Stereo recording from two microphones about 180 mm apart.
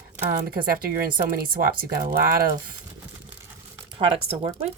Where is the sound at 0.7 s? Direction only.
55° right (ahead or behind).